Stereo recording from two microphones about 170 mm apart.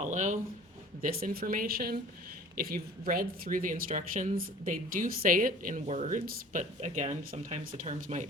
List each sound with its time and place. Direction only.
0.0 s speech: 45° right (ahead or behind)
1.0 s a woman's voice: 60° right (ahead or behind); by 8.3 s 45° right (ahead or behind)